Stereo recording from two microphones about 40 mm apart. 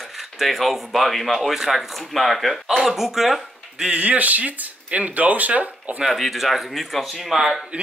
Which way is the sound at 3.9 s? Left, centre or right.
Right.